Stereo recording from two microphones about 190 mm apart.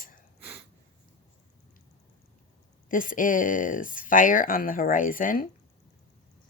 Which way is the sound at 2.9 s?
45° left (ahead or behind).